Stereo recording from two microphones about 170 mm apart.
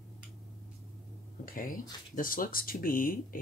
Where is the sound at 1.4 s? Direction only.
55° left (ahead or behind).